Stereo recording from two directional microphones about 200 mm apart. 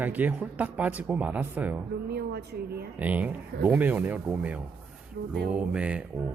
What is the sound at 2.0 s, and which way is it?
Speech, 50° right (ahead or behind).